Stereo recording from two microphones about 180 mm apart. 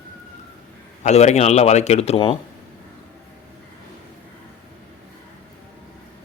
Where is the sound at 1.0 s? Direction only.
40° left (ahead or behind).